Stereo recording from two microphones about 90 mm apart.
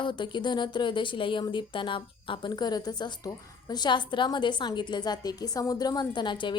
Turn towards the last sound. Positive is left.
turn(degrees=60)  # may be behind; listen again after turning